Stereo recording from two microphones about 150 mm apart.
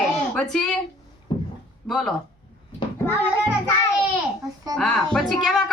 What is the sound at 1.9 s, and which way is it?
Speech, centre (ahead or behind).